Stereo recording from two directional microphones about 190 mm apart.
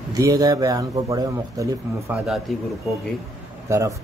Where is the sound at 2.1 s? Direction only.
Centre (ahead or behind).